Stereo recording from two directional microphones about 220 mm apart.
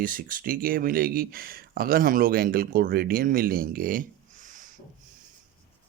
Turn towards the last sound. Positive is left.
turn(degrees=-35)  # may be behind; listen again after turning